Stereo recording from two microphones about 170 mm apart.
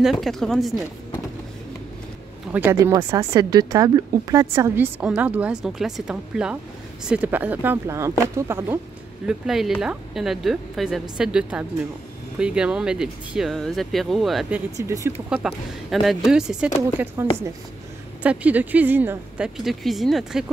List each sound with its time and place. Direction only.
0.0 s speech: centre (ahead or behind)
2.5 s speech: 15° right (ahead or behind)
9.2 s speech: 5° right (ahead or behind)
14.8 s speech: 15° right (ahead or behind)
15.2 s speech: 5° right (ahead or behind)
18.2 s speech: 10° right (ahead or behind)